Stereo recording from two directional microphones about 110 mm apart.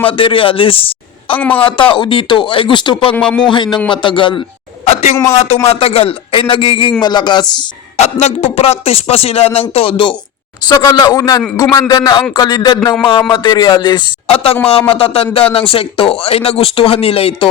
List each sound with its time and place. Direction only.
0.1 s speech: 50° left (ahead or behind)
1.4 s a man's voice: 15° left (ahead or behind)
1.7 s speech: 50° left (ahead or behind)
3.2 s a man's voice: 5° left (ahead or behind)
3.5 s speech: 45° left (ahead or behind)
4.9 s speech: 90° left
5.1 s speech: 25° left (ahead or behind)
5.6 s speech: 65° left (ahead or behind); by 7.4 s 40° left (ahead or behind)
7.9 s speech: 75° left (ahead or behind); by 10.2 s 55° left (ahead or behind)
10.6 s speech: 35° left (ahead or behind)
14.3 s speech: 60° left (ahead or behind)